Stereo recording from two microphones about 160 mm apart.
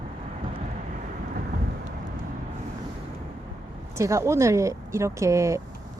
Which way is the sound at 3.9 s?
20° right (ahead or behind).